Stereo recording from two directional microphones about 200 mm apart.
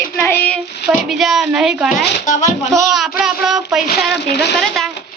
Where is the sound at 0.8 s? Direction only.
Centre (ahead or behind).